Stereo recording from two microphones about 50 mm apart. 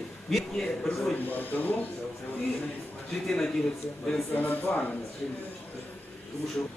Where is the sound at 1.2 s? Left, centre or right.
Left.